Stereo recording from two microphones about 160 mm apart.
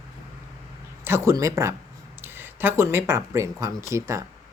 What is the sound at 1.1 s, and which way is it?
Speech, 15° right (ahead or behind).